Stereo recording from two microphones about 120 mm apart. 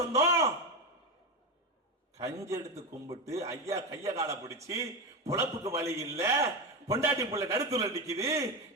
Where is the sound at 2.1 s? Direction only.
25° right (ahead or behind).